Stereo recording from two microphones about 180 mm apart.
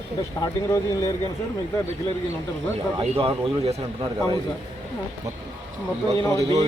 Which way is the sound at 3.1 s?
30° right (ahead or behind).